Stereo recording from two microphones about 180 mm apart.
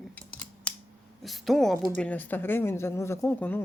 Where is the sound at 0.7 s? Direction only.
10° left (ahead or behind).